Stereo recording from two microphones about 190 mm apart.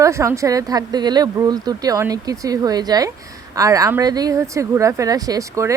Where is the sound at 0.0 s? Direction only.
15° right (ahead or behind).